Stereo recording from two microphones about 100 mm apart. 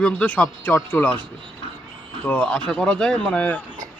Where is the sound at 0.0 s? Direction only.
15° left (ahead or behind).